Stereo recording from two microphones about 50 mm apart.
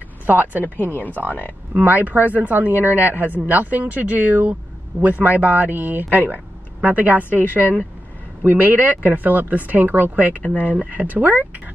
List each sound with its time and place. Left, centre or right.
0.3 s speech: right
0.8 s speech: left
1.7 s speech: right
10.4 s speech: left
10.7 s speech: right